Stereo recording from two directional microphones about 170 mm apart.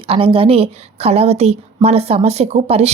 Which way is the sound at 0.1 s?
35° right (ahead or behind).